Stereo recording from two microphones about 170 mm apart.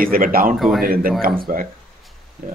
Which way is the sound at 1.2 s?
60° right (ahead or behind).